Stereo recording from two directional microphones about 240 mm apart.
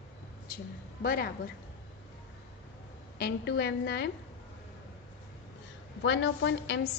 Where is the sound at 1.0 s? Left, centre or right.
Left.